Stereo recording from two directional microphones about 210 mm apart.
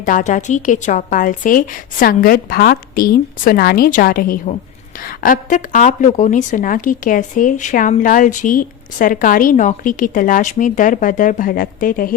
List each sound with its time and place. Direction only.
0.0 s a woman's voice: 40° left (ahead or behind)